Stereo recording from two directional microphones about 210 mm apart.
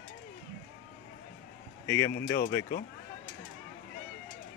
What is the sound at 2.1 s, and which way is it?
Speech, 50° left (ahead or behind).